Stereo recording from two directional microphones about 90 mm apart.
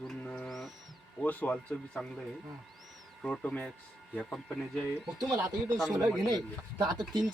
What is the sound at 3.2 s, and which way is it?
Speech, 10° left (ahead or behind).